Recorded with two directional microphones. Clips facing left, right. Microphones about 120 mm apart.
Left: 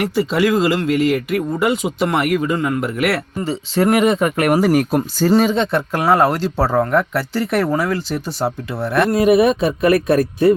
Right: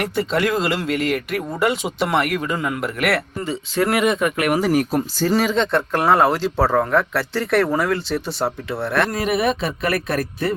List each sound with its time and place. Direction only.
0.0 s speech: 5° left (ahead or behind)
3.4 s speech: 30° left (ahead or behind)
4.7 s speech: 55° left (ahead or behind)
5.3 s speech: 30° left (ahead or behind)
5.5 s speech: 5° left (ahead or behind)
9.2 s speech: 15° left (ahead or behind)